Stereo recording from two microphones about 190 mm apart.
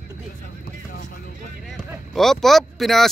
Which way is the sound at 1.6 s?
Centre (ahead or behind).